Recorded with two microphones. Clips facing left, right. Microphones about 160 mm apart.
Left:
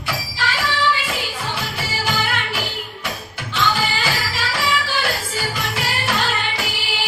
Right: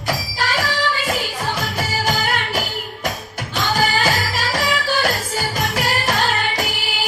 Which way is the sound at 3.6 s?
45° right (ahead or behind).